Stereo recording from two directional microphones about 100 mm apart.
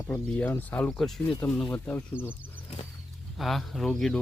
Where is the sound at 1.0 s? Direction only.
Centre (ahead or behind).